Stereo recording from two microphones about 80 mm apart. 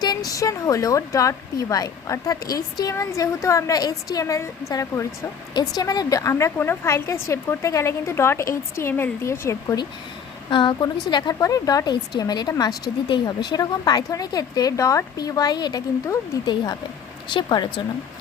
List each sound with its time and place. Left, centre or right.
0.0 s speech: left
3.0 s speech: left
5.5 s speech: left
6.3 s a woman's voice: left
10.5 s a woman's voice: left
11.3 s speech: left
17.2 s a woman's voice: left